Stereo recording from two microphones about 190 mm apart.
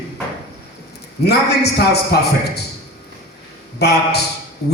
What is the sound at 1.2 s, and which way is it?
A man's voice, 60° left (ahead or behind).